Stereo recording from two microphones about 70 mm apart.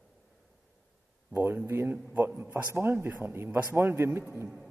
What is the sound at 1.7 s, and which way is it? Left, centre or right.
Speech, right.